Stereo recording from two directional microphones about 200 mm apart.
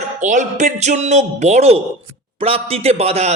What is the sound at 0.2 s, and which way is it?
A man's voice, 40° right (ahead or behind).